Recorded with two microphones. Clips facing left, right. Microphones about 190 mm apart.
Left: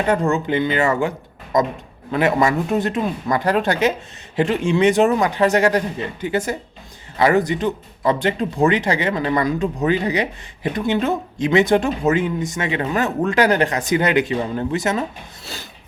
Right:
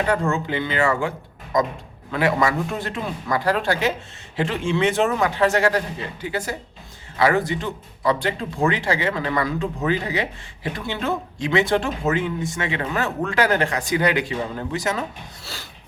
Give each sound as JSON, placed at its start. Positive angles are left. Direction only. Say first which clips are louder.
{"t": 0.1, "sound": "speech", "louder": "left 4 dB", "side_deg": 20}
{"t": 2.1, "sound": "speech", "louder": "left 3 dB", "side_deg": 20}